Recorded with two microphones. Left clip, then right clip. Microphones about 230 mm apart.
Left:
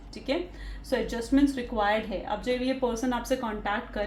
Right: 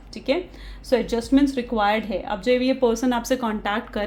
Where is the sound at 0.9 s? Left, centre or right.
Right.